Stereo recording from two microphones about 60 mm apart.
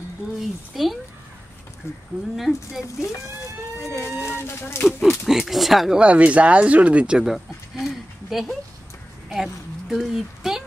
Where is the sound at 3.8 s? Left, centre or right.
Left.